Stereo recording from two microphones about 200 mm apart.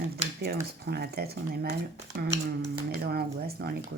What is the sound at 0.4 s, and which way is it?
Speech, 50° right (ahead or behind).